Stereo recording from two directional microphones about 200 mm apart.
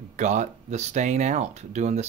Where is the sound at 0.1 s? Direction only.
35° right (ahead or behind).